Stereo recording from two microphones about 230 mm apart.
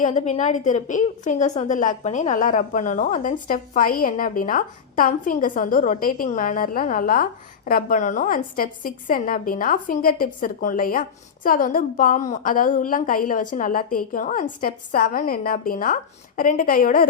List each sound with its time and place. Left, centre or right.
0.0 s a woman's voice: left